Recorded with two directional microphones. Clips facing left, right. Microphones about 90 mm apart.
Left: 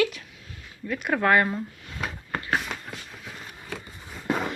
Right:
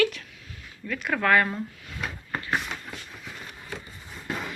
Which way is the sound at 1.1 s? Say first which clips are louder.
Left 1 dB; 25° left (ahead or behind).